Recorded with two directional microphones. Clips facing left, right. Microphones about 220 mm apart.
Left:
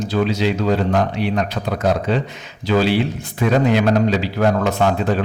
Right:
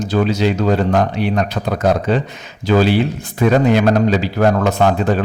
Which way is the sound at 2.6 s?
45° right (ahead or behind).